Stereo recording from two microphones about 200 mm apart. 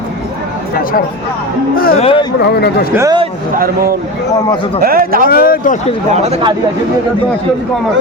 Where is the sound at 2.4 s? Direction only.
55° left (ahead or behind).